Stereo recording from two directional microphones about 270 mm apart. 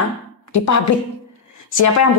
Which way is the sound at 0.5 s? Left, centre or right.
Left.